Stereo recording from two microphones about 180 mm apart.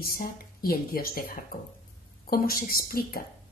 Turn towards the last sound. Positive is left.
turn(degrees=55)  # may be behind; listen again after turning